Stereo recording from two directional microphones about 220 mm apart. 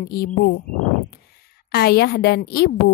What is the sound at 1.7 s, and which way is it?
A woman's voice, 45° left (ahead or behind).